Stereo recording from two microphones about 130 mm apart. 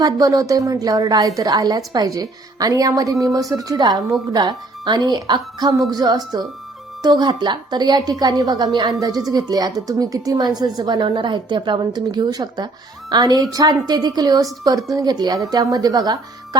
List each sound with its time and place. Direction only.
0.0 s a woman's voice: 30° right (ahead or behind)